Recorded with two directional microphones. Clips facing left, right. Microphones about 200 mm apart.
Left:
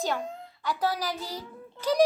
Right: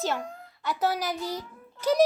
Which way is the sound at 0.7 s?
10° right (ahead or behind).